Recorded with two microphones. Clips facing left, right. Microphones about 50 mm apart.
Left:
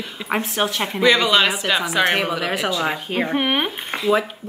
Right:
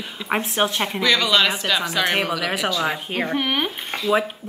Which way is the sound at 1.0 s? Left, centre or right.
Centre.